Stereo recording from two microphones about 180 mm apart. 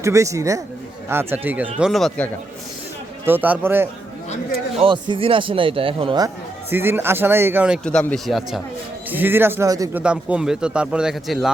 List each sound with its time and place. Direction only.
0.0 s speech: 15° right (ahead or behind)
1.8 s a man's voice: centre (ahead or behind)
3.2 s speech: 10° right (ahead or behind)
4.8 s a man's voice: 30° right (ahead or behind); by 7.8 s 10° right (ahead or behind)
7.9 s a man's voice: 5° left (ahead or behind); by 10.0 s 20° right (ahead or behind)
10.0 s a man's voice: 5° right (ahead or behind)